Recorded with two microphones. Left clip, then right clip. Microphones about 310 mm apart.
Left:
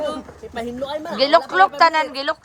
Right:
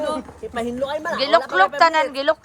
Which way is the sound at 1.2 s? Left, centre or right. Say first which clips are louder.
Left 2 dB; centre.